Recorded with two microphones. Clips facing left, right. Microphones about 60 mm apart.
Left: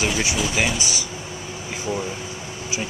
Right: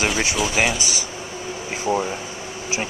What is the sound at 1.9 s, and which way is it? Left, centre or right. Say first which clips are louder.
Speech: right 5 dB; right.